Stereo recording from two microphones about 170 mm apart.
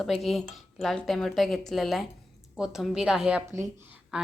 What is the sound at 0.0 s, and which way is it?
A woman's voice, centre (ahead or behind).